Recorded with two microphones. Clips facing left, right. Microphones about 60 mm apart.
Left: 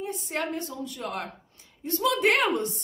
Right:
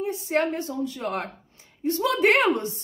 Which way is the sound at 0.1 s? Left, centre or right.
Right.